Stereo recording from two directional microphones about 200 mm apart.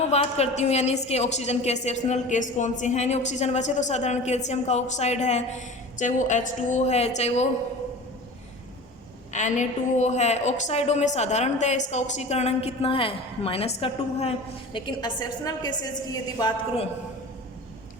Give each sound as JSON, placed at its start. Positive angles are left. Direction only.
{"t": 0.1, "sound": "a woman's voice", "side_deg": 30}
{"t": 9.3, "sound": "a woman's voice", "side_deg": 35}